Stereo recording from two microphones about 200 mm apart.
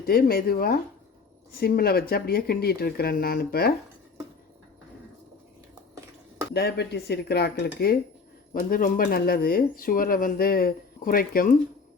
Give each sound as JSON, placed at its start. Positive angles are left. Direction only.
{"t": 0.0, "sound": "speech", "side_deg": 50}
{"t": 6.5, "sound": "speech", "side_deg": 55}